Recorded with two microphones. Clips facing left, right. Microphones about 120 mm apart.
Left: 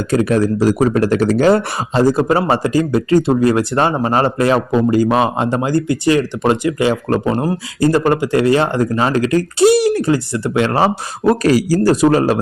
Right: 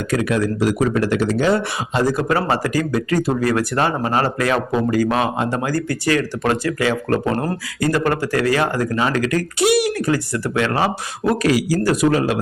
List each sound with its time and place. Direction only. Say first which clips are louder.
0.1 s speech: left 5 dB; 35° left (ahead or behind)
2.0 s speech: left 5 dB; 30° left (ahead or behind)
7.3 s speech: left 4 dB; 15° left (ahead or behind)
7.8 s speech: left 5 dB; 30° left (ahead or behind)